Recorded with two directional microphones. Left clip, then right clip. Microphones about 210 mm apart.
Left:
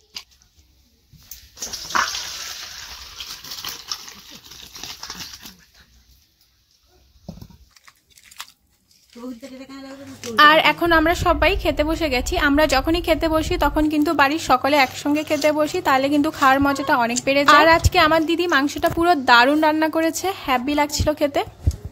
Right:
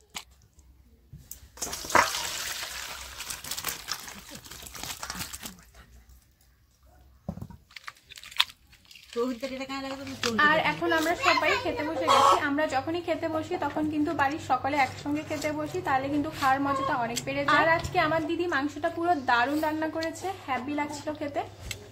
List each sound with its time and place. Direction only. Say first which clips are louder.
10.3 s a woman's voice: left 11 dB; 45° left (ahead or behind)